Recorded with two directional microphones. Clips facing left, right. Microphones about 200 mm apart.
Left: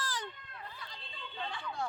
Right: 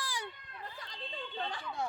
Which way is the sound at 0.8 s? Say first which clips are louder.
Right 5 dB; 40° right (ahead or behind).